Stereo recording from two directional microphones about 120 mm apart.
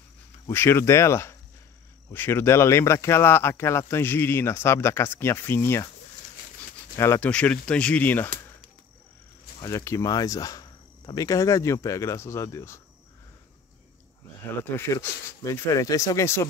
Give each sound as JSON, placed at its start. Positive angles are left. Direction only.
{"t": 0.5, "sound": "speech", "side_deg": 20}
{"t": 7.0, "sound": "speech", "side_deg": 20}
{"t": 7.2, "sound": "speech", "side_deg": 10}
{"t": 9.6, "sound": "speech", "side_deg": 25}
{"t": 14.6, "sound": "speech", "side_deg": 20}